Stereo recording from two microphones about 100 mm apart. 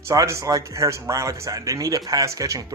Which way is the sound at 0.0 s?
30° right (ahead or behind).